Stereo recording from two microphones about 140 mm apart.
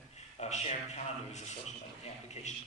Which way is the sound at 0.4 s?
50° left (ahead or behind).